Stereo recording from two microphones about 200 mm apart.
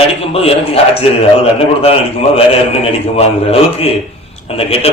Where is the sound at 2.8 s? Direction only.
30° left (ahead or behind).